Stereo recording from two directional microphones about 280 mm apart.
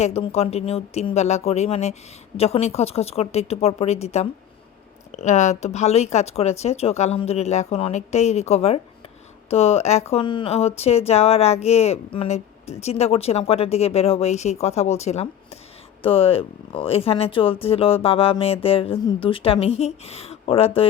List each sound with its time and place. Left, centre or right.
0.0 s speech: left